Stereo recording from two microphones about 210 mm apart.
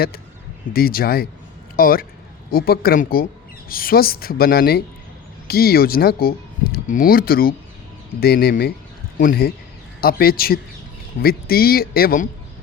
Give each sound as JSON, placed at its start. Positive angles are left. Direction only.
{"t": 0.7, "sound": "speech", "side_deg": 45}